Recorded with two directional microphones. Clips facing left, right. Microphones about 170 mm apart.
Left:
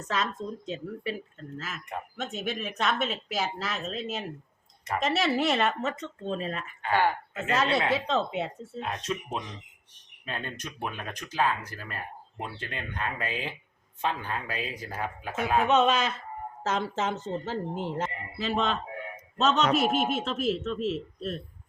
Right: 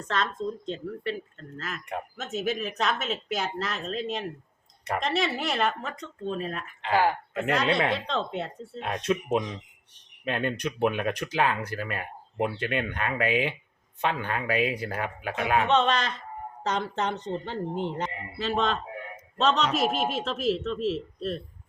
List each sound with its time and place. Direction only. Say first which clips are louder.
0.1 s a woman's voice: right 2 dB; 5° left (ahead or behind)
8.8 s speech: right 5 dB; 65° right (ahead or behind)
15.6 s a woman's voice: left 3 dB; 5° left (ahead or behind)